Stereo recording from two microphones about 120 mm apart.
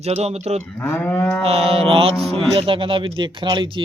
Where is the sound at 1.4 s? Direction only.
55° right (ahead or behind).